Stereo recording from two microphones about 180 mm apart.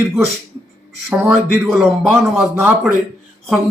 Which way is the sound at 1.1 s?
10° right (ahead or behind).